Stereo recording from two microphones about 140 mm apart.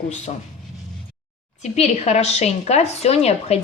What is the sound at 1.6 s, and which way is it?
Speech, 50° left (ahead or behind).